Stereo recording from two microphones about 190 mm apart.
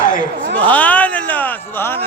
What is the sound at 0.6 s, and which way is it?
Speech, 10° left (ahead or behind).